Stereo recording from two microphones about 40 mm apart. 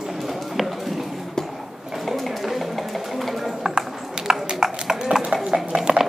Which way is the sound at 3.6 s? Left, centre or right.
Centre.